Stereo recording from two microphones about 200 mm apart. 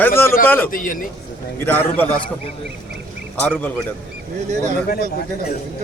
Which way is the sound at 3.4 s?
10° left (ahead or behind).